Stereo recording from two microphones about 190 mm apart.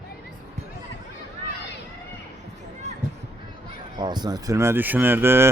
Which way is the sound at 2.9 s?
35° right (ahead or behind).